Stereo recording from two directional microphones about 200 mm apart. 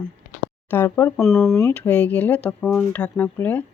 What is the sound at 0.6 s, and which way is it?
Speech, 10° left (ahead or behind).